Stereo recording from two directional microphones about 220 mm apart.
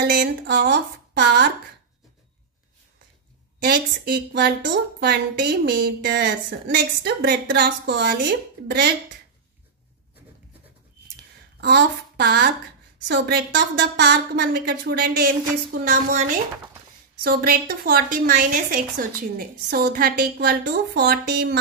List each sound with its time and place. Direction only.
0.0 s a woman's voice: 45° right (ahead or behind)
3.6 s a woman's voice: 45° right (ahead or behind)
11.1 s a sound: 45° right (ahead or behind)
13.1 s a woman's voice: 50° right (ahead or behind)